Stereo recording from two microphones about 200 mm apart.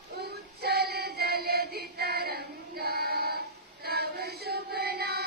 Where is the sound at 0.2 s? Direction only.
55° right (ahead or behind).